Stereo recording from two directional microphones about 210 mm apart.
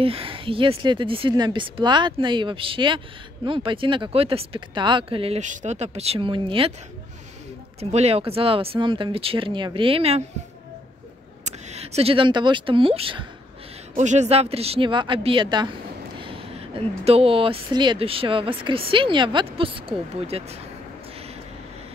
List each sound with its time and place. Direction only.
0.0 s speech: 25° right (ahead or behind)
7.8 s speech: 30° right (ahead or behind)
11.4 s speech: 30° right (ahead or behind)